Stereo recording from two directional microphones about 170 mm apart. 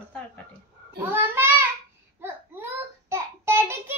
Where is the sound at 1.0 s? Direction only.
10° right (ahead or behind).